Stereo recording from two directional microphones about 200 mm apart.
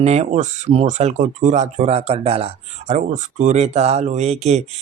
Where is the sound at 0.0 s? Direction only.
35° right (ahead or behind).